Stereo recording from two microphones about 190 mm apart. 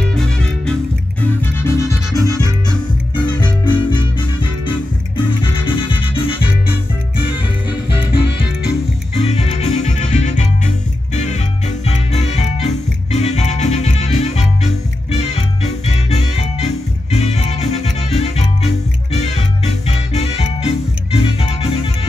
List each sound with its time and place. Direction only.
0.1 s music: 5° left (ahead or behind)
1.4 s music: 15° left (ahead or behind)
2.1 s music: 15° right (ahead or behind)
3.3 s music: 25° left (ahead or behind)
9.2 s music: 30° left (ahead or behind)